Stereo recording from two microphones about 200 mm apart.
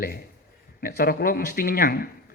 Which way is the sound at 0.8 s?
45° left (ahead or behind).